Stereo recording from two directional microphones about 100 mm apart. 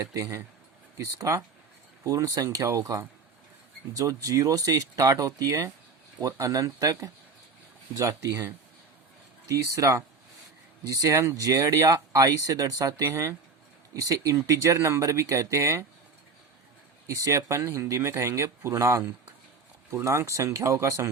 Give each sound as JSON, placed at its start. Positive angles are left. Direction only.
{"t": 0.0, "sound": "speech", "side_deg": -35}
{"t": 17.2, "sound": "speech", "side_deg": -30}